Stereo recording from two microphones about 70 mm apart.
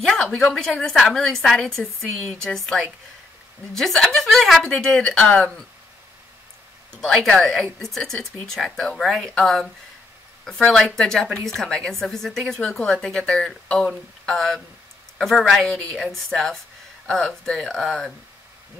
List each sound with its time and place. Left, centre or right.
0.0 s a woman's voice: centre
6.9 s a woman's voice: centre